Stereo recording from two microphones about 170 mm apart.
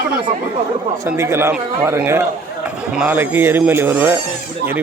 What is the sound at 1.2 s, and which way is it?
Speech, 15° right (ahead or behind).